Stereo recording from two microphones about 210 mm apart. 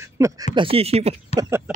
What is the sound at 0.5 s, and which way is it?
Speech, 25° right (ahead or behind).